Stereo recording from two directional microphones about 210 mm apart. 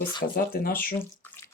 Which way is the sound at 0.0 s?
20° left (ahead or behind).